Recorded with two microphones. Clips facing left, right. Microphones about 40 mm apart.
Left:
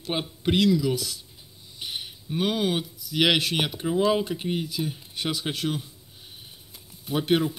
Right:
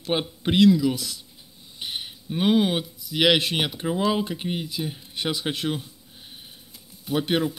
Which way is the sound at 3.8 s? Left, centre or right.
Centre.